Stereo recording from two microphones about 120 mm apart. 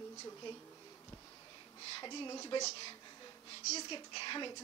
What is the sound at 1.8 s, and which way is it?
A woman's voice, 40° left (ahead or behind).